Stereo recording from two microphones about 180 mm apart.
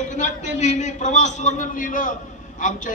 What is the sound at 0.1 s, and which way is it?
A man's voice, 40° left (ahead or behind).